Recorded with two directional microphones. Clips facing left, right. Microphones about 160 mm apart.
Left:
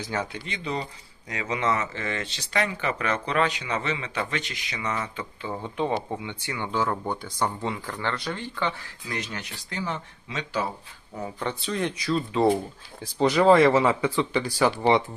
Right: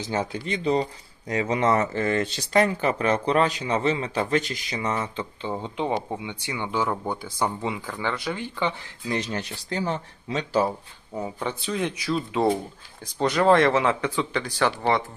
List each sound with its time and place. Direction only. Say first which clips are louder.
0.0 s speech: right 3 dB; 25° right (ahead or behind)
0.4 s speech: right 8 dB; 35° right (ahead or behind); by 8.7 s 15° right (ahead or behind)
9.0 s speech: right 6 dB; 30° right (ahead or behind)
11.2 s speech: right 1 dB; 5° right (ahead or behind); by 15.0 s 10° left (ahead or behind)